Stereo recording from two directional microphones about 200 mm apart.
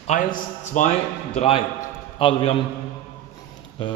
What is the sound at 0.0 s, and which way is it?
A man's voice, 40° left (ahead or behind).